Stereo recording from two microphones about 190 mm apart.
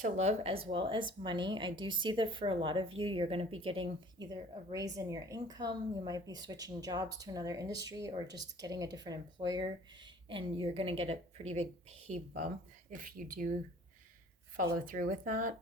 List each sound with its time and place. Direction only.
0.0 s speech: 35° right (ahead or behind)
13.0 s speech: 45° right (ahead or behind)
14.8 s speech: 45° right (ahead or behind)